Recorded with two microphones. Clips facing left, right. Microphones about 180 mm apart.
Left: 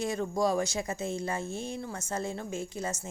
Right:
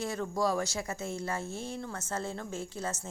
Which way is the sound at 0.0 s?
20° left (ahead or behind).